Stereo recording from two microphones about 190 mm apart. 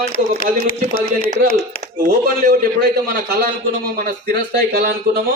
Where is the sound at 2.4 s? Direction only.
55° right (ahead or behind).